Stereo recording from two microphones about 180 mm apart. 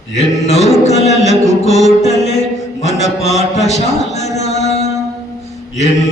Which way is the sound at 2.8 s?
40° left (ahead or behind).